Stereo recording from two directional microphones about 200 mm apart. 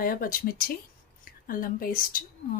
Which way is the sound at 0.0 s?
45° left (ahead or behind).